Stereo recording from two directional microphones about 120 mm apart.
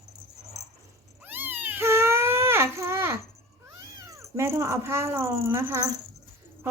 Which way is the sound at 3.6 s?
25° right (ahead or behind).